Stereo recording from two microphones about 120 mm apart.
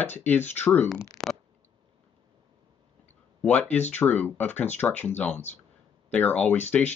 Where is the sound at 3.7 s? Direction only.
15° left (ahead or behind).